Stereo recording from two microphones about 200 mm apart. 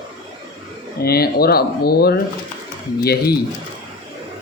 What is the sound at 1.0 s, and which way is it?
Speech, 50° left (ahead or behind).